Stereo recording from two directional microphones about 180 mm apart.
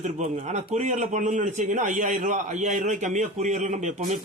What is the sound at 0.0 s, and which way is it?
A man's voice, 40° right (ahead or behind).